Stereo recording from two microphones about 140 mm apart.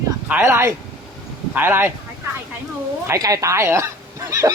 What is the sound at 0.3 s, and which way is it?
Speech, 15° right (ahead or behind).